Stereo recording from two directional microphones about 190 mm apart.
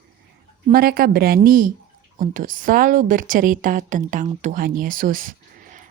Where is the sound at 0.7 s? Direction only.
50° right (ahead or behind).